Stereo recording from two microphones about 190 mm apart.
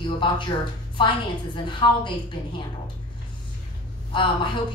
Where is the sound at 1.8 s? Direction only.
25° left (ahead or behind).